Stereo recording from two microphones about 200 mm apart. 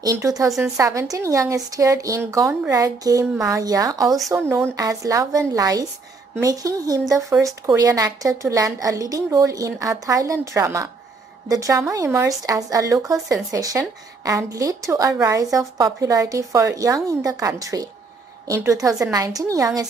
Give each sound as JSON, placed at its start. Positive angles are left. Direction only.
{"t": 0.0, "sound": "a woman's voice", "side_deg": -15}